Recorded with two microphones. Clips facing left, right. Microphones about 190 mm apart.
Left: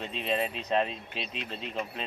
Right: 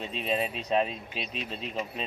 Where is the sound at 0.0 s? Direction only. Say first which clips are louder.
Even; 10° right (ahead or behind).